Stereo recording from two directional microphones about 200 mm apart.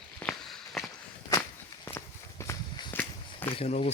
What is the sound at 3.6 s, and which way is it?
Speech, 35° left (ahead or behind).